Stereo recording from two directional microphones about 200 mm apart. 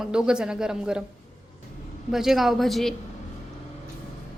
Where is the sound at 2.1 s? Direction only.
Centre (ahead or behind).